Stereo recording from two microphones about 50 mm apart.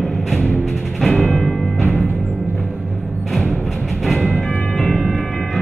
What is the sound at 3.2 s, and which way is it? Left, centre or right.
Music, centre.